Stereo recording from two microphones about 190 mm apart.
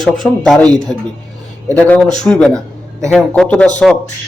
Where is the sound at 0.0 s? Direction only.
Centre (ahead or behind).